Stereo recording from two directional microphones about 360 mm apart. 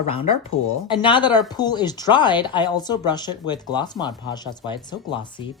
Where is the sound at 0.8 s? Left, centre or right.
Centre.